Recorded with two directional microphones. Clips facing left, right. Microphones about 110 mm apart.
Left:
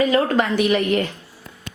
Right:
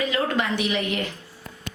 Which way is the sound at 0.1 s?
45° left (ahead or behind).